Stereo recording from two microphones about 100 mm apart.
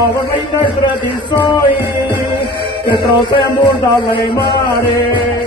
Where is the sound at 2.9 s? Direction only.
55° left (ahead or behind).